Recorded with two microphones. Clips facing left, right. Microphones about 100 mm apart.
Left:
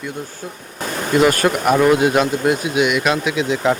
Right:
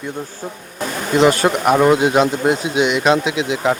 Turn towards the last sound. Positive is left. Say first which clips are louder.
# right 2 dB
turn(degrees=-20)  # may be behind; listen again after turning